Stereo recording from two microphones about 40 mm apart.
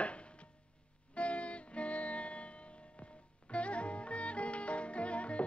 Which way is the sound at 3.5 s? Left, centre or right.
Left.